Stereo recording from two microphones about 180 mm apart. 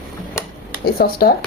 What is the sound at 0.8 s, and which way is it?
Speech, 60° left (ahead or behind).